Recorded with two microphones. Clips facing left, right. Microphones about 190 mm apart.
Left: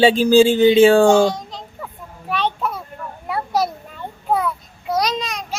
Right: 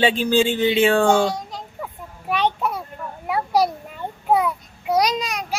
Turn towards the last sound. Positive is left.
turn(degrees=-10)  # may be behind; listen again after turning